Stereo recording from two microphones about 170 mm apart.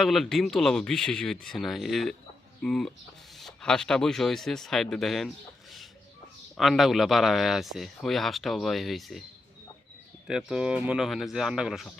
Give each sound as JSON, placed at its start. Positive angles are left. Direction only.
{"t": 0.0, "sound": "speech", "side_deg": 0}
{"t": 6.6, "sound": "speech", "side_deg": 0}
{"t": 10.2, "sound": "speech", "side_deg": -5}